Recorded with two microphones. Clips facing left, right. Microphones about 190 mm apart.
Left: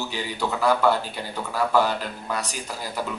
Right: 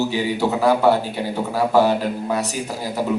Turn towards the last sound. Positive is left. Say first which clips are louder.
# right 6 dB
turn(degrees=-10)  # may be behind; listen again after turning